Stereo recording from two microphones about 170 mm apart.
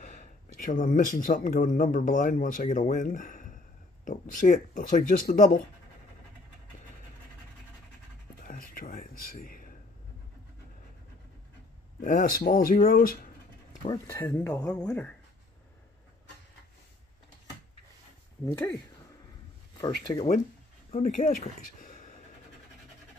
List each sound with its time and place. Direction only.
0.0 s speech: 45° left (ahead or behind)
8.4 s a sound: 55° left (ahead or behind)
12.0 s speech: 50° left (ahead or behind)
14.1 s speech: 10° left (ahead or behind)
18.4 s speech: 15° left (ahead or behind)
20.2 s speech: 45° left (ahead or behind)